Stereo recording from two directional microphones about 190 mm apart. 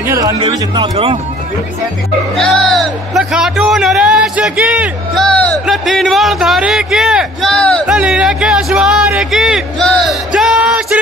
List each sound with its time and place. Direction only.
0.0 s speech: 15° right (ahead or behind)
0.4 s speech: 30° right (ahead or behind)
2.3 s a man's voice: centre (ahead or behind)
7.8 s music: 5° right (ahead or behind)